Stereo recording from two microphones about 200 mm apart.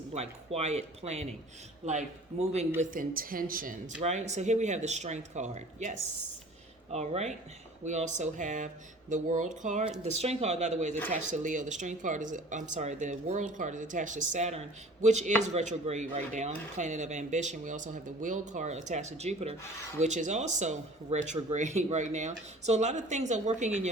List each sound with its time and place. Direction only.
0.1 s speech: 35° right (ahead or behind)